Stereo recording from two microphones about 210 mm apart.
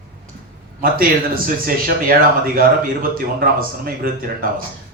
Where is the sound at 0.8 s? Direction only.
45° right (ahead or behind).